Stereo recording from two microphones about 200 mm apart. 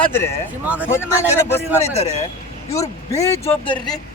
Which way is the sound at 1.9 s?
35° left (ahead or behind).